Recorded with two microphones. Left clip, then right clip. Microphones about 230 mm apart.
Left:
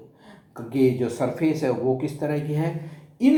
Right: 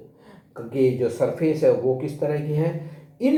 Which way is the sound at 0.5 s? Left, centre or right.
Left.